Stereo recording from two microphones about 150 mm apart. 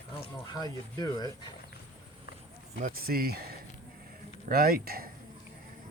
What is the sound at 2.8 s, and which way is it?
Speech, 85° right.